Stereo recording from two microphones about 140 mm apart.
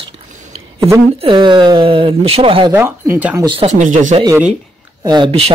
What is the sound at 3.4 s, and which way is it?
Speech, 40° right (ahead or behind).